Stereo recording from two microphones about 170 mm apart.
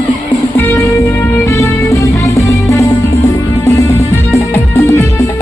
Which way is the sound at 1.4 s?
20° left (ahead or behind).